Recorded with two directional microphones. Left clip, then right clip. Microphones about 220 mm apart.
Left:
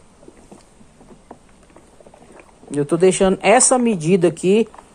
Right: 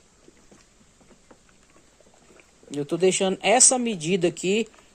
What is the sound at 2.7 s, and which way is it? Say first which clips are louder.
Speech: left 7 dB; 10° right (ahead or behind).